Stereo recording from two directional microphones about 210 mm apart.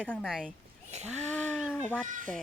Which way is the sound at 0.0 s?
5° left (ahead or behind).